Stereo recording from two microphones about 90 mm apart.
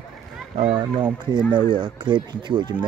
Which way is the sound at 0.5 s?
80° right.